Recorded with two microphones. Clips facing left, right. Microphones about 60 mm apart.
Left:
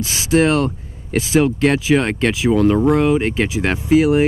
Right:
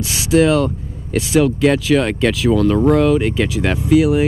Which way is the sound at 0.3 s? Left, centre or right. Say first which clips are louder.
Right 2 dB; centre.